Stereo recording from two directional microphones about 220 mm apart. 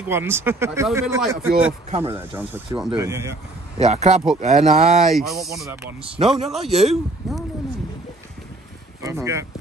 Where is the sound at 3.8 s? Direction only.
30° right (ahead or behind).